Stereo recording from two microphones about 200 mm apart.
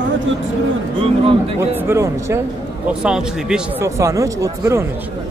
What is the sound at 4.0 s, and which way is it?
Speech, 15° right (ahead or behind).